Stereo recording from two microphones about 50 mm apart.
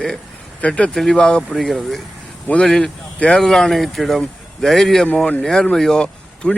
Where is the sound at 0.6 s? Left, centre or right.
Left.